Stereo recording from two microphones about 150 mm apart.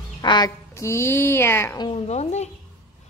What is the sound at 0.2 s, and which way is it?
Speech, 30° left (ahead or behind).